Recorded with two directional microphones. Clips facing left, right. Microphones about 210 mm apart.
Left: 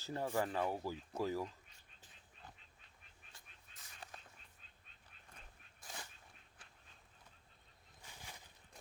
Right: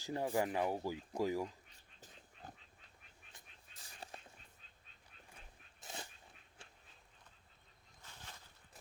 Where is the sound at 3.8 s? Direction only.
30° right (ahead or behind).